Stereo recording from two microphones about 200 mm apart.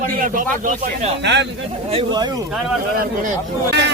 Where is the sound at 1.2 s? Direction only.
60° right (ahead or behind).